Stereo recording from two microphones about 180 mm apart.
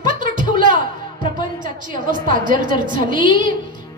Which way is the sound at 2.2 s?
50° right (ahead or behind).